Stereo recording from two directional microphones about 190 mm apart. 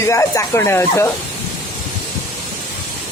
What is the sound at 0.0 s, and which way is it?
Speech, 15° left (ahead or behind).